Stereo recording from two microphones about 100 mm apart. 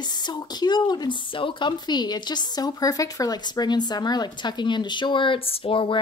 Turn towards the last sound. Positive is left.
turn(degrees=60)  # may be behind; listen again after turning